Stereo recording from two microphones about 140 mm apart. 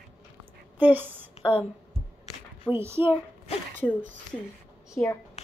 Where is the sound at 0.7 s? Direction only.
15° right (ahead or behind).